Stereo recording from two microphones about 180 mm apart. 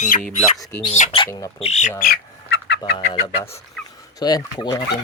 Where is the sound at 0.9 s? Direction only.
40° left (ahead or behind).